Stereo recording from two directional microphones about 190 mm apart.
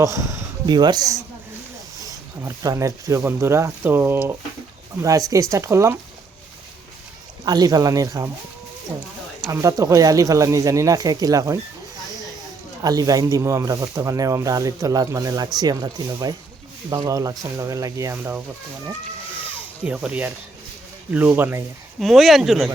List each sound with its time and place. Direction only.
0.0 s speech: 15° right (ahead or behind)
2.4 s speech: 15° right (ahead or behind)
7.4 s speech: 20° right (ahead or behind)
9.5 s speech: 20° right (ahead or behind)
12.8 s speech: 20° right (ahead or behind)
19.8 s speech: 5° right (ahead or behind)
22.0 s speech: centre (ahead or behind)